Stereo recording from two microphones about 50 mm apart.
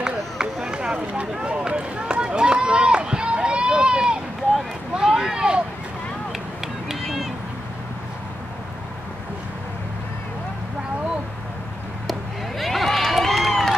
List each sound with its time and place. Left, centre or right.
0.0 s run: centre
4.9 s vehicle: centre
6.9 s run: centre
12.1 s a sound: centre